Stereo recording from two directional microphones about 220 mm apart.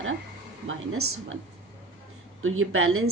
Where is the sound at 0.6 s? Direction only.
70° right (ahead or behind).